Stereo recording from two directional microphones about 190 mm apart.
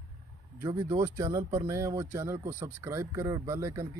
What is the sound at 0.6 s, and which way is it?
Speech, 15° right (ahead or behind).